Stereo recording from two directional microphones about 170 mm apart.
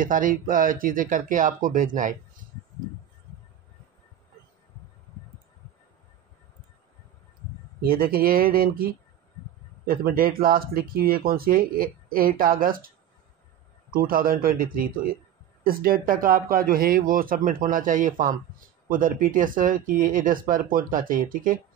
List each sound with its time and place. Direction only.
0.0 s speech: 50° right (ahead or behind)
7.8 s speech: 60° right (ahead or behind)